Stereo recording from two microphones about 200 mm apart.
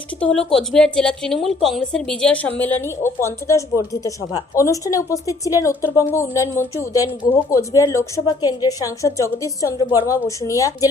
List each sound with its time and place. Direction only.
0.2 s a woman's voice: 5° left (ahead or behind)